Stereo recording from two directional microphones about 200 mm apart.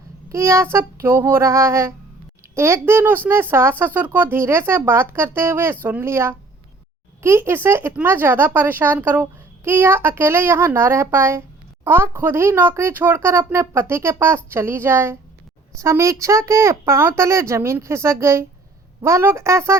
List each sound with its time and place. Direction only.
0.3 s speech: 15° right (ahead or behind)